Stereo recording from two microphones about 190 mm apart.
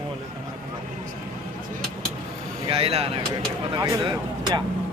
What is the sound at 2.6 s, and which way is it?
Speech, 30° right (ahead or behind).